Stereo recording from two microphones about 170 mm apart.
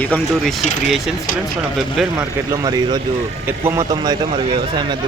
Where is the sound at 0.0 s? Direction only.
5° left (ahead or behind).